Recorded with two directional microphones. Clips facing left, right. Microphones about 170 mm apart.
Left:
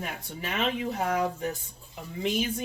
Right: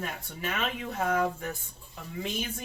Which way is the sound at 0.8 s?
15° left (ahead or behind).